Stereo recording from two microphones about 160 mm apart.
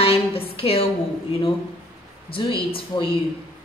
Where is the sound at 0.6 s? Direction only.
35° left (ahead or behind).